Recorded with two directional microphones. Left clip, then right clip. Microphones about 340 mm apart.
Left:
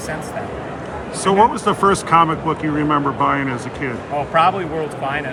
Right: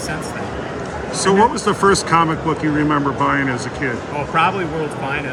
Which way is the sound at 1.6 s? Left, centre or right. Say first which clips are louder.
Right 1 dB; centre.